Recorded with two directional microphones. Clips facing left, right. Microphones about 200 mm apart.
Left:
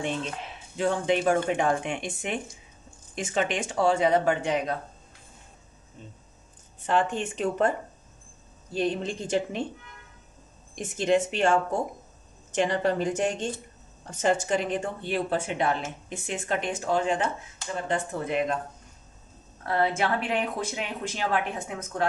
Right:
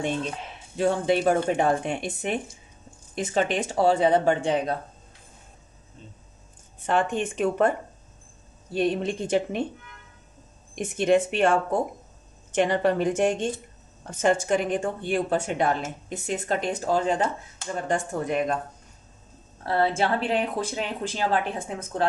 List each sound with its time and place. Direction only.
0.7 s speech: 40° right (ahead or behind)
6.9 s speech: 55° right (ahead or behind)
8.7 s speech: 60° right (ahead or behind)
11.0 s speech: 55° right (ahead or behind)
12.5 s speech: 55° right (ahead or behind)
19.6 s speech: 30° right (ahead or behind)